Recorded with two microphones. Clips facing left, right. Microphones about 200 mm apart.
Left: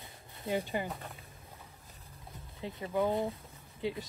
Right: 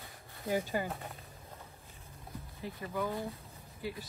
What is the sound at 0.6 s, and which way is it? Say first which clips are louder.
Speech: even; 15° left (ahead or behind).